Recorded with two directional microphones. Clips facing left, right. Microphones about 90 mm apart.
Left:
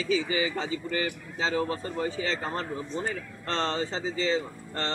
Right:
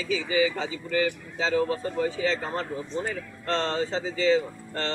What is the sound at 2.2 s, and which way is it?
Speech, 35° left (ahead or behind).